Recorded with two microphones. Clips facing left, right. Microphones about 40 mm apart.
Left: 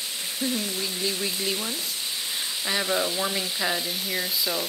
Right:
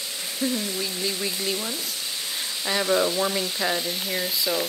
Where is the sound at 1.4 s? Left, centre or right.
Centre.